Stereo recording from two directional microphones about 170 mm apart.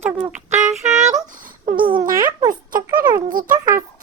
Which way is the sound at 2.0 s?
55° right (ahead or behind).